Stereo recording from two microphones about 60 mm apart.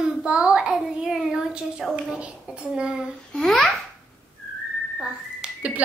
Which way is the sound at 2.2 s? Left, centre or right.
Centre.